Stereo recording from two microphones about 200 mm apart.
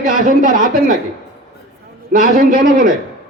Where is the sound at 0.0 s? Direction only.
40° right (ahead or behind).